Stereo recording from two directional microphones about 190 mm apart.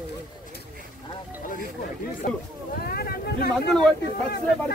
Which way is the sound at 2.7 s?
55° left (ahead or behind).